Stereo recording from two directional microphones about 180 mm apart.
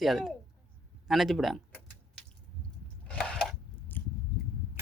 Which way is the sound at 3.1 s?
5° left (ahead or behind).